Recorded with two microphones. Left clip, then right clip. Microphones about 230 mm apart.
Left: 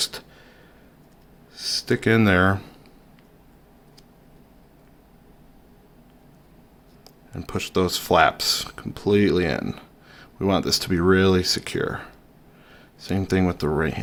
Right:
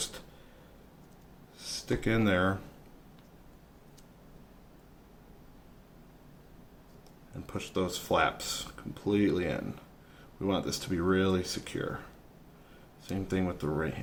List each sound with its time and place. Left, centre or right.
1.5 s speech: left
7.3 s speech: left
13.1 s speech: left